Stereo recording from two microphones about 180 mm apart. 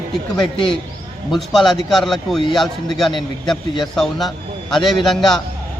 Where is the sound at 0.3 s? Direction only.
30° left (ahead or behind).